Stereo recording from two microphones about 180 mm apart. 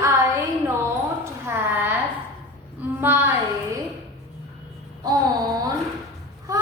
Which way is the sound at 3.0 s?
10° right (ahead or behind).